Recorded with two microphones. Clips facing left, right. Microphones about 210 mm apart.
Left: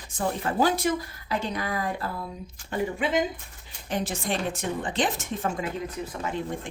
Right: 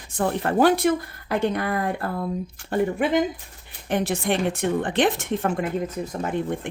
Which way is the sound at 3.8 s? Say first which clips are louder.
Right 6 dB; 60° right (ahead or behind).